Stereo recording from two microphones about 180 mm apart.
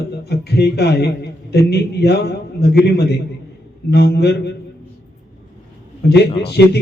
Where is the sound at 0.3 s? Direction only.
65° left (ahead or behind).